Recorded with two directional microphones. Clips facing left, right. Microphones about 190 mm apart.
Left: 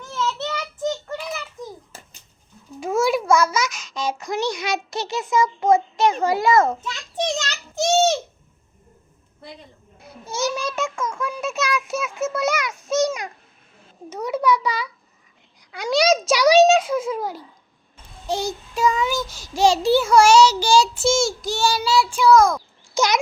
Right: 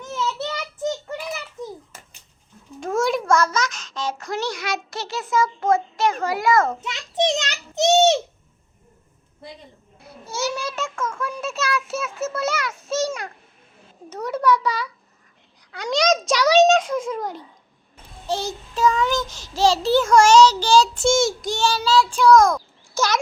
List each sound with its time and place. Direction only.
0.0 s child singing: 15° right (ahead or behind)
1.9 s a sound: 30° left (ahead or behind)
2.8 s a child's voice: 5° left (ahead or behind); by 6.7 s 25° left (ahead or behind)
6.8 s a child's voice: 20° right (ahead or behind)
10.2 s child singing: 20° left (ahead or behind)
14.1 s child singing: 10° left (ahead or behind)
23.0 s a child's voice: 15° left (ahead or behind)